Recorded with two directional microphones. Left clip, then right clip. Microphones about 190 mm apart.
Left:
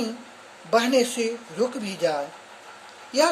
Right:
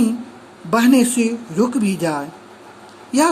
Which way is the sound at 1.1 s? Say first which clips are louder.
Right 6 dB; 10° right (ahead or behind).